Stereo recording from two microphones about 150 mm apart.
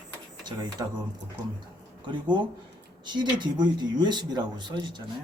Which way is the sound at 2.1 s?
30° right (ahead or behind).